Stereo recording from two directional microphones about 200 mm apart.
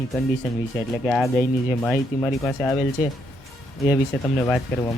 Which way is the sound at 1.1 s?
Centre (ahead or behind).